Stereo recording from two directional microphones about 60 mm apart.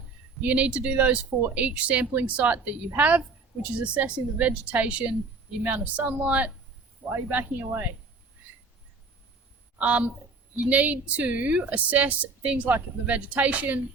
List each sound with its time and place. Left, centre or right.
0.4 s a woman's voice: right
7.1 s speech: right
9.7 s a woman's voice: right